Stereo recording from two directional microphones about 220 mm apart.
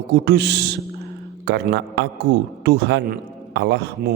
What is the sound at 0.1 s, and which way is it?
A man's voice, 50° right (ahead or behind).